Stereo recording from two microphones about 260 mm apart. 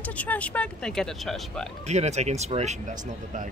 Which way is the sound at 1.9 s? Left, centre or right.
Right.